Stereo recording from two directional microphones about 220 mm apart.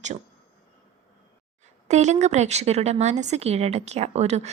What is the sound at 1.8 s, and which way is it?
A woman's voice, 30° right (ahead or behind).